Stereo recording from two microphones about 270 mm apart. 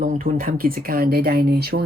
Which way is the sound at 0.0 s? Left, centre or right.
Right.